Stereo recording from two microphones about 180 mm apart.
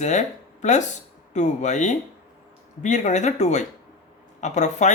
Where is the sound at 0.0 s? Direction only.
40° left (ahead or behind).